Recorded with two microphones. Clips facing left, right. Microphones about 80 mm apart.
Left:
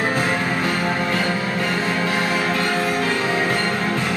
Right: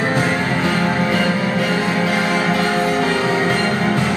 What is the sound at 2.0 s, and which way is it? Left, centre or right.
Music, centre.